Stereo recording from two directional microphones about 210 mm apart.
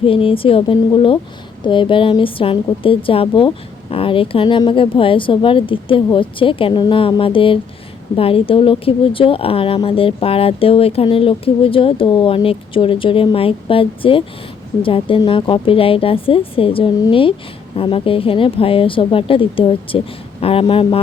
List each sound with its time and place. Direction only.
0.0 s speech: 25° left (ahead or behind)